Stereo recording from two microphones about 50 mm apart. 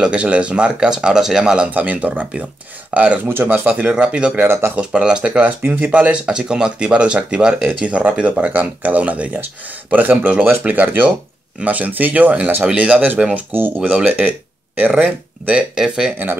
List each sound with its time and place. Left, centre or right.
0.0 s speech: right
1.7 s speech: right
3.3 s speech: right
3.9 s speech: right
4.5 s speech: right
4.7 s speech: right
12.7 s speech: right
13.5 s speech: right
13.9 s speech: right
15.5 s speech: centre